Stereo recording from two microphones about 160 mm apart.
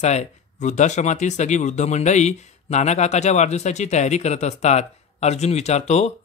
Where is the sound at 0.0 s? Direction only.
45° left (ahead or behind).